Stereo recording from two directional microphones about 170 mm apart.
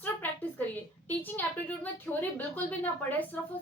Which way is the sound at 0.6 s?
10° left (ahead or behind).